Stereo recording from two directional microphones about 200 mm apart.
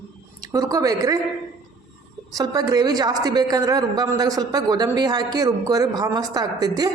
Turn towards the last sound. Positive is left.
turn(degrees=-20)  # may be behind; listen again after turning